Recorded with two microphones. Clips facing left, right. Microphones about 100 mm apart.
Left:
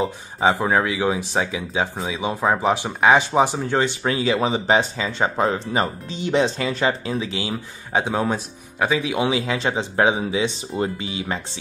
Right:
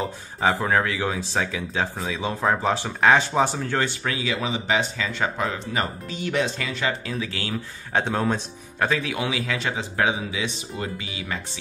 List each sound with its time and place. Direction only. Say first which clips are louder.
0.0 s speech: left 4 dB; 20° left (ahead or behind)
4.1 s speech: left 6 dB; 35° left (ahead or behind)